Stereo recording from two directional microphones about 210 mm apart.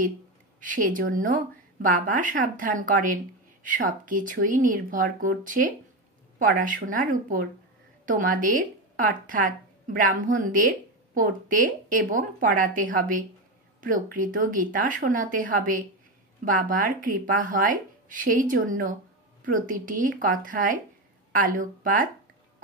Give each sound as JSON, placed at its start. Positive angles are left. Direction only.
{"t": 0.6, "sound": "a woman's voice", "side_deg": -40}